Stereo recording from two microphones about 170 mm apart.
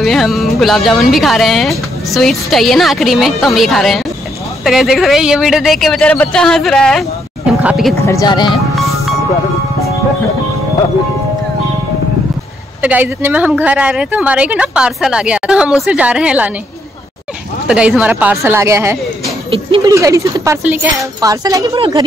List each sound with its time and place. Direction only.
0.0 s speech: centre (ahead or behind)
8.0 s speech: 20° left (ahead or behind)
12.8 s speech: 10° right (ahead or behind)
17.6 s speech: 5° right (ahead or behind)
20.6 s speech: 10° right (ahead or behind)
21.2 s speech: 20° right (ahead or behind)
21.7 s a woman's voice: 30° right (ahead or behind)